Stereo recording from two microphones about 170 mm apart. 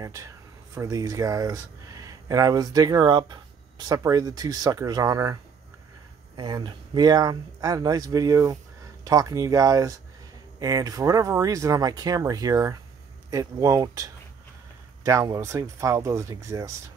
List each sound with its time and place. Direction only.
0.0 s speech: 20° right (ahead or behind)